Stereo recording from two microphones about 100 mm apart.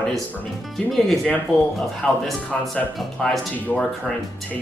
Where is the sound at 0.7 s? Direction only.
5° left (ahead or behind).